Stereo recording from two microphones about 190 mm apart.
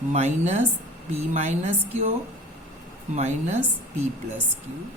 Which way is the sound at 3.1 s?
40° right (ahead or behind).